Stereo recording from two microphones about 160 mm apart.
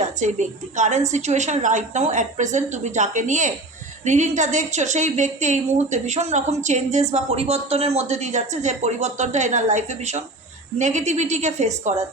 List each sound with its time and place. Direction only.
0.0 s a woman's voice: 50° right (ahead or behind)